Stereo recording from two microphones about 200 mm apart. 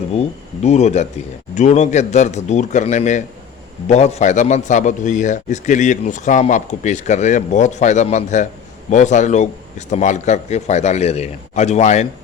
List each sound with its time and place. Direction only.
0.2 s a man's voice: 35° left (ahead or behind)